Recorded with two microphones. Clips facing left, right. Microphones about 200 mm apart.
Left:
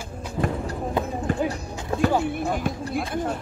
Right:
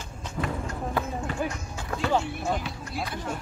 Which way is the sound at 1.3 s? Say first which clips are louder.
Left 7 dB; 50° left (ahead or behind).